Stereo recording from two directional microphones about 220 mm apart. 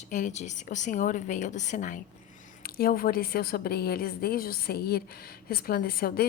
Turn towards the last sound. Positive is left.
turn(degrees=45)  # may be behind; listen again after turning